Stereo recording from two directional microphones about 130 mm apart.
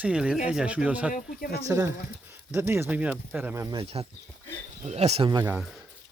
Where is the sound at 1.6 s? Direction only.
25° right (ahead or behind); by 3.5 s 10° right (ahead or behind).